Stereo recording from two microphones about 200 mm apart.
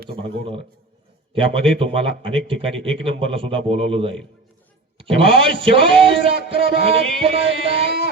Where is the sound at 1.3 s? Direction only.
25° right (ahead or behind).